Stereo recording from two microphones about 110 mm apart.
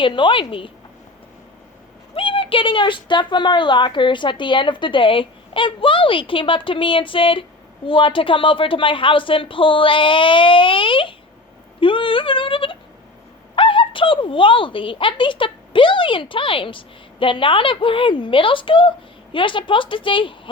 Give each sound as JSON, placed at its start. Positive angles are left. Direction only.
{"t": 0.0, "sound": "speech", "side_deg": 50}
{"t": 2.1, "sound": "speech", "side_deg": 55}